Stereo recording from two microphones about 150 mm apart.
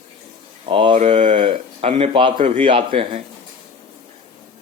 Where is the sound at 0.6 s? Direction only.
35° right (ahead or behind).